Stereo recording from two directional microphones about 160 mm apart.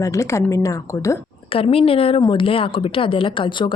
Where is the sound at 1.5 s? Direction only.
35° left (ahead or behind).